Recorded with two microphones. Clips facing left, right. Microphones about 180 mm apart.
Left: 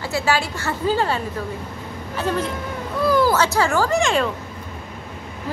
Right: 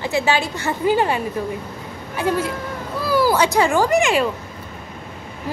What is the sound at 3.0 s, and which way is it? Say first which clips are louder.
A child's voice: even; 5° right (ahead or behind).